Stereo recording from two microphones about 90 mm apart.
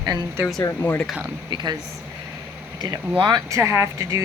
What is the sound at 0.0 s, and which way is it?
Speech, 50° right (ahead or behind).